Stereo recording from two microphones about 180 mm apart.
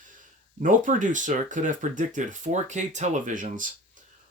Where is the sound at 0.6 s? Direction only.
45° right (ahead or behind).